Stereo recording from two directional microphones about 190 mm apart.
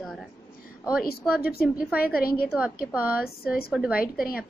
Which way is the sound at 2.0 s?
50° left (ahead or behind).